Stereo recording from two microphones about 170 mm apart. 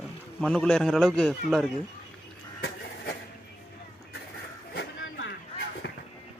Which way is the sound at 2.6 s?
70° left (ahead or behind).